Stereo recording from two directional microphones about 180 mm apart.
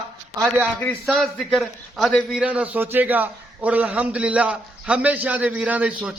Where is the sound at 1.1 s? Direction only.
Centre (ahead or behind).